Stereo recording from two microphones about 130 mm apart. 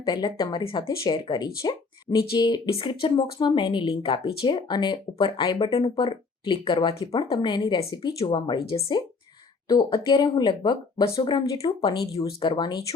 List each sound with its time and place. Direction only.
0.0 s speech: 35° left (ahead or behind)